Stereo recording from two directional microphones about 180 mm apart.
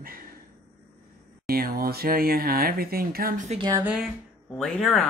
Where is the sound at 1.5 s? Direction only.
55° right (ahead or behind).